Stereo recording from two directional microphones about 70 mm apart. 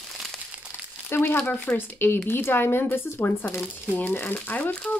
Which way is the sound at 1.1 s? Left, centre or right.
Left.